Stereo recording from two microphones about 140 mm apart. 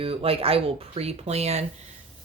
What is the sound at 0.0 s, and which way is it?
Speech, 45° right (ahead or behind).